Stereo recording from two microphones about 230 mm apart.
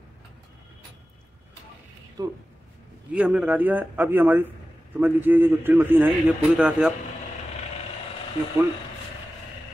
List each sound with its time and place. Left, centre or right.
2.2 s a man's voice: centre
3.1 s a man's voice: centre